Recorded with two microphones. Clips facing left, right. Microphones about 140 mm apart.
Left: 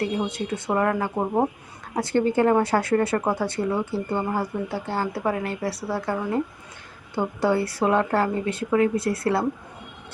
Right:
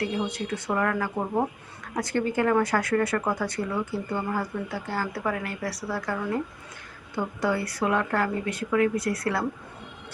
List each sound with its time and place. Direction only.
0.0 s speech: 25° left (ahead or behind)